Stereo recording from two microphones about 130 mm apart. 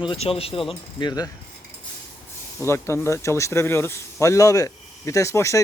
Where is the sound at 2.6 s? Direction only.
20° left (ahead or behind).